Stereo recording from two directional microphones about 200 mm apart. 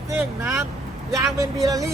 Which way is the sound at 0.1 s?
10° right (ahead or behind).